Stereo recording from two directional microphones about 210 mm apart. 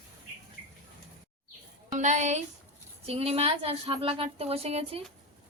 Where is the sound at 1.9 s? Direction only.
35° right (ahead or behind).